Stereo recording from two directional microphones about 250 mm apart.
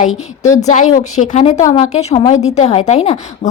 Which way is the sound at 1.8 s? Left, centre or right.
Left.